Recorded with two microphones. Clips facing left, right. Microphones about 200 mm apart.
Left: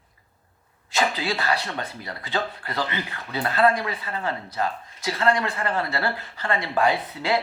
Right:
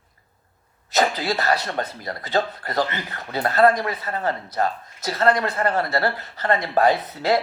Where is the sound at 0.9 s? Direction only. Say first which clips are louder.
Right 3 dB; 40° right (ahead or behind).